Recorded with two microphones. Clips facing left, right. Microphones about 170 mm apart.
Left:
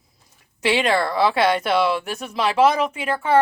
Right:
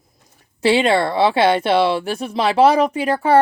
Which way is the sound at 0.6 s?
30° right (ahead or behind).